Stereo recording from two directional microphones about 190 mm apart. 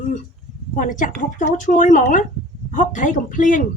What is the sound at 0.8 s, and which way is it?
A woman's voice, 45° left (ahead or behind).